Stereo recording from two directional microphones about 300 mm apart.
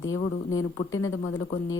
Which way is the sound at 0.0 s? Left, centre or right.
Left.